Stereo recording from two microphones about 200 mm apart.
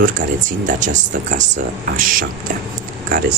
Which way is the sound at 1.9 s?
45° right (ahead or behind).